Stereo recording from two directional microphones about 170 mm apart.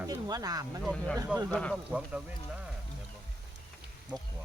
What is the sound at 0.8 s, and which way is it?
Speech, 5° left (ahead or behind).